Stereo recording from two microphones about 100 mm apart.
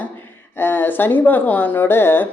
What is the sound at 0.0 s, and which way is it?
Speech, 20° left (ahead or behind).